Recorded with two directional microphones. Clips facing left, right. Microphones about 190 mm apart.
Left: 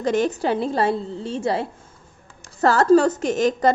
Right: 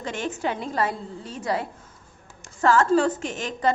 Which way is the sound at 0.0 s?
40° left (ahead or behind).